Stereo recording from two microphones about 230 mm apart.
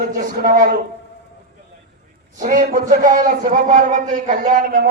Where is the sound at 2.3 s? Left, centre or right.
Right.